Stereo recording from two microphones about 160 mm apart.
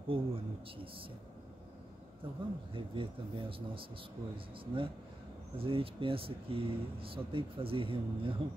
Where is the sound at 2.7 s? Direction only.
30° right (ahead or behind).